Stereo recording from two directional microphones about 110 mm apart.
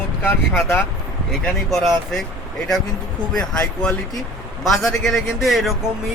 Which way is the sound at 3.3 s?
5° left (ahead or behind).